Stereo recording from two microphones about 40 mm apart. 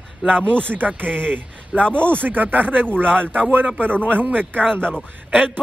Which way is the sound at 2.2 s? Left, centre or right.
Right.